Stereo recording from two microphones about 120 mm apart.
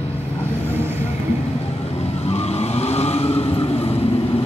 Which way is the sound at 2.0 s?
60° left (ahead or behind).